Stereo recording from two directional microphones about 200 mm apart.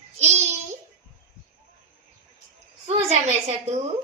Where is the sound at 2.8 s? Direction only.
35° right (ahead or behind).